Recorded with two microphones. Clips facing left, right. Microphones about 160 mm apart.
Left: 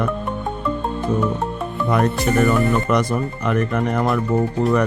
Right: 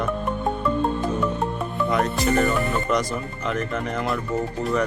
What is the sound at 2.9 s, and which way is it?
Speech, 60° left (ahead or behind).